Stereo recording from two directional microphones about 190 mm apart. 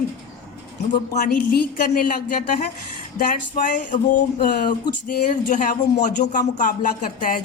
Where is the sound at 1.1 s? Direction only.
45° left (ahead or behind).